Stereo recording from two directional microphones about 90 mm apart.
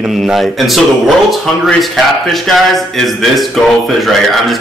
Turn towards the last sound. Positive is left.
turn(degrees=0)  # may be behind; listen again after turning